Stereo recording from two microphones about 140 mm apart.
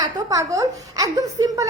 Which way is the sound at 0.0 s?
25° right (ahead or behind).